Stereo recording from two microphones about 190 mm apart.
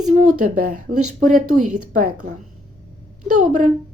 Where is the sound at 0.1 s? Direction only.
40° right (ahead or behind).